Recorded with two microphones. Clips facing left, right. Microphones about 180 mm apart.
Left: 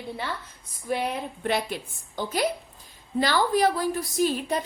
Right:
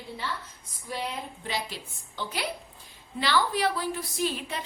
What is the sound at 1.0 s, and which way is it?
A woman's voice, 60° left (ahead or behind).